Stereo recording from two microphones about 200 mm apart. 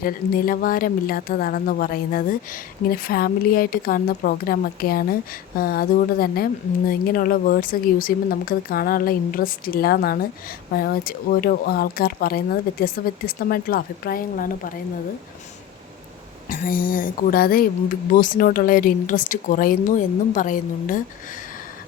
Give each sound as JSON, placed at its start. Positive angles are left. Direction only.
{"t": 0.0, "sound": "speech", "side_deg": 45}
{"t": 16.5, "sound": "speech", "side_deg": 45}